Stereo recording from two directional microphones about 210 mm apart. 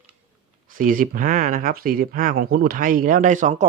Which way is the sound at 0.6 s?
40° right (ahead or behind).